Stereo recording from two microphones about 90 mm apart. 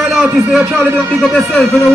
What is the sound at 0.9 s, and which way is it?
Speech, 10° left (ahead or behind).